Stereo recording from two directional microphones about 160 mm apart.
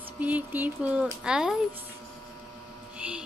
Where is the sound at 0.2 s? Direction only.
10° right (ahead or behind).